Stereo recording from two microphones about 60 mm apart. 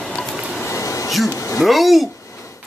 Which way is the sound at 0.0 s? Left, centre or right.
Centre.